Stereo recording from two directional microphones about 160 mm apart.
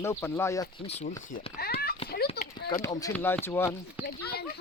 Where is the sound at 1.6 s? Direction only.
75° left (ahead or behind).